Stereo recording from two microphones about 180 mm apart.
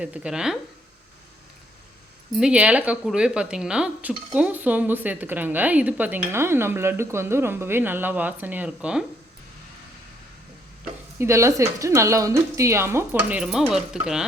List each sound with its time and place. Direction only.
0.0 s speech: 5° right (ahead or behind)
2.3 s speech: 5° right (ahead or behind)
11.2 s speech: 15° right (ahead or behind)
13.4 s speech: 5° right (ahead or behind)